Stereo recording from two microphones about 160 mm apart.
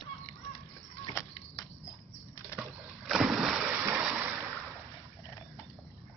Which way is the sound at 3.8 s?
15° right (ahead or behind).